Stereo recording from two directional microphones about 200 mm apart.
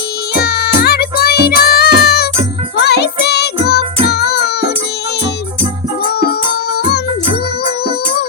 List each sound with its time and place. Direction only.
0.3 s music: 50° left (ahead or behind)